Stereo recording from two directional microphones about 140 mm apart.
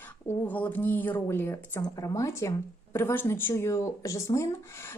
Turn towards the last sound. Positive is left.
turn(degrees=20)  # may be behind; listen again after turning